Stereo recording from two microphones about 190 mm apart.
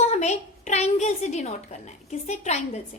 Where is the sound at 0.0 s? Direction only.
35° left (ahead or behind).